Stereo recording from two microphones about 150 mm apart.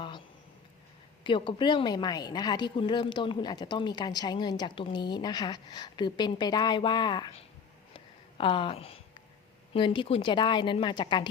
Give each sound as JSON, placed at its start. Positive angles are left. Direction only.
{"t": 1.2, "sound": "a woman's voice", "side_deg": 35}
{"t": 7.9, "sound": "a sound", "side_deg": 35}
{"t": 9.7, "sound": "a woman's voice", "side_deg": 35}